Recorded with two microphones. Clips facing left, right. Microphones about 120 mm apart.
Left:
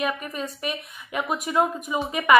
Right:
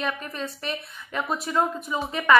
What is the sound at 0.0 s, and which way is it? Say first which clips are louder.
A woman's voice: left 2 dB; 10° left (ahead or behind).